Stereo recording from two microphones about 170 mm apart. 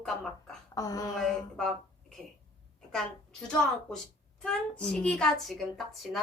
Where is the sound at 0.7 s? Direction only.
20° left (ahead or behind).